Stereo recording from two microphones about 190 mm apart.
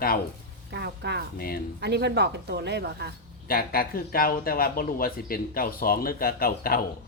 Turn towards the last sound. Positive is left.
turn(degrees=50)  # may be behind; listen again after turning